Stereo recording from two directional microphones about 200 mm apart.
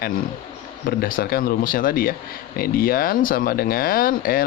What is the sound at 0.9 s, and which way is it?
Speech, 45° left (ahead or behind).